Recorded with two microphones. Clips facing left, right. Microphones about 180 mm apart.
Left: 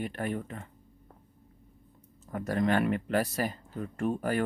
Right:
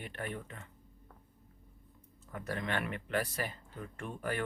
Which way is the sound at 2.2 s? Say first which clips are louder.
Left 10 dB; 40° left (ahead or behind).